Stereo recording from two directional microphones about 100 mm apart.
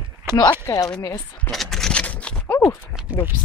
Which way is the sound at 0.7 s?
30° left (ahead or behind).